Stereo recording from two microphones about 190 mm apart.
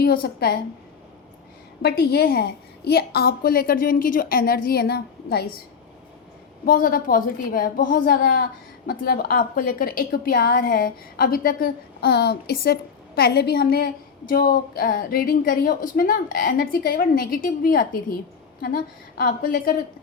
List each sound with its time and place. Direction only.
0.0 s a woman's voice: 55° left (ahead or behind)
1.8 s a woman's voice: 55° left (ahead or behind)
6.7 s a woman's voice: 45° left (ahead or behind)